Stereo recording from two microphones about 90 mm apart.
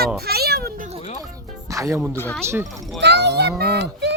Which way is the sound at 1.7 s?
35° right (ahead or behind).